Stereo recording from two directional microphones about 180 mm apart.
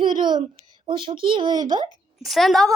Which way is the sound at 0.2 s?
25° right (ahead or behind).